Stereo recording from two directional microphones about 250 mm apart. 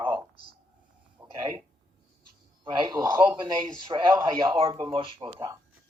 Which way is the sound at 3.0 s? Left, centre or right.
Centre.